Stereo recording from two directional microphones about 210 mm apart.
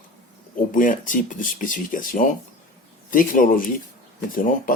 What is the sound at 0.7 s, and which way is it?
Speech, 40° left (ahead or behind).